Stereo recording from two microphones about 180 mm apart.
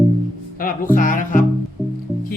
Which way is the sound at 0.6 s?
50° left (ahead or behind).